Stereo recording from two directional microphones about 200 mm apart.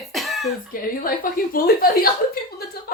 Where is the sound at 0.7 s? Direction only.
45° left (ahead or behind).